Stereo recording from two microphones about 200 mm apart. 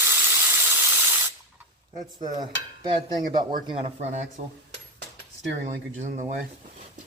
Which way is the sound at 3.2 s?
45° right (ahead or behind).